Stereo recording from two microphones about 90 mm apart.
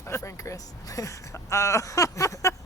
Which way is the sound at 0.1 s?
35° left (ahead or behind).